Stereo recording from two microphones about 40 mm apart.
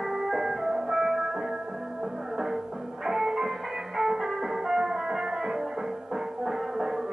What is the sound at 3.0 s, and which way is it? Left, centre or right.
Music, centre.